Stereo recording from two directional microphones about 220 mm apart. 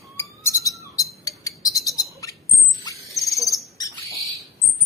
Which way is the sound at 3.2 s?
15° left (ahead or behind).